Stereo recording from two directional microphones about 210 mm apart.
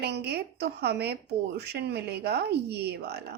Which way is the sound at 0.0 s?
50° right (ahead or behind).